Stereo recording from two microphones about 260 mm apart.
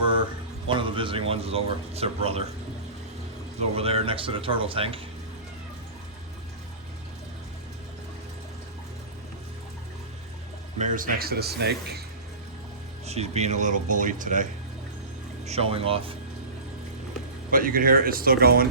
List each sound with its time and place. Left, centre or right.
0.7 s speech: centre
3.8 s speech: right
10.8 s speech: right
13.1 s speech: right
15.4 s speech: right
17.5 s speech: right